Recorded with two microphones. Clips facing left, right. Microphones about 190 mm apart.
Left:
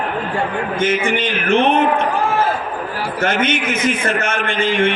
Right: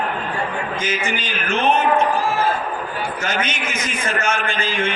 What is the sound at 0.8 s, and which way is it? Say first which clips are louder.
Speech: left 6 dB; 65° left (ahead or behind).